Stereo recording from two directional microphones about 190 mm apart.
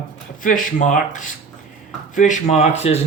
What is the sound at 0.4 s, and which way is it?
Speech, 45° left (ahead or behind).